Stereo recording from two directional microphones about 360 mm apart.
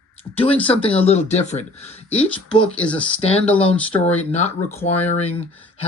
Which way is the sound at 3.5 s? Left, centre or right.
Centre.